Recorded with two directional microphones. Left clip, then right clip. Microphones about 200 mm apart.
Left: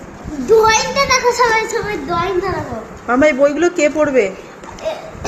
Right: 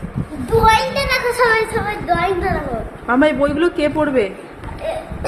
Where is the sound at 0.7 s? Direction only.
35° right (ahead or behind).